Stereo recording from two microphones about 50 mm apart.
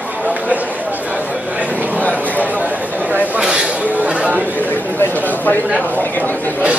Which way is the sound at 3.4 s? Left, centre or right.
Centre.